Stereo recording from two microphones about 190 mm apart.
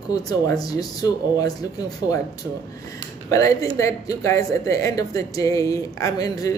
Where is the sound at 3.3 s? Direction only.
15° left (ahead or behind).